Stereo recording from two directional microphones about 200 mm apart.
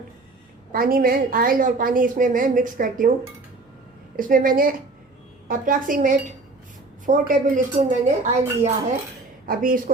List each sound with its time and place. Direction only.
0.7 s a woman's voice: 45° right (ahead or behind)
4.2 s a woman's voice: 45° right (ahead or behind)